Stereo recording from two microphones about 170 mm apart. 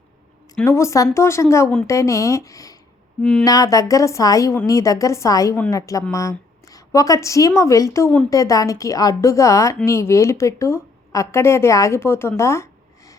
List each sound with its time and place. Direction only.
0.6 s a woman's voice: 15° left (ahead or behind)
3.2 s a woman's voice: 5° left (ahead or behind)
3.4 s a woman's voice: 20° left (ahead or behind)
12.4 s a sound: 15° left (ahead or behind)